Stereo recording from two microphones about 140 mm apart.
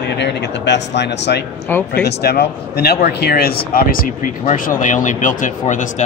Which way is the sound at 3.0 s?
90° left.